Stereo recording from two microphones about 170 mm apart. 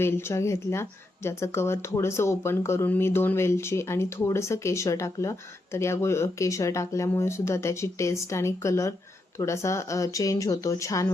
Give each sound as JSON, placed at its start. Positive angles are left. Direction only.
{"t": 0.0, "sound": "speech", "side_deg": 15}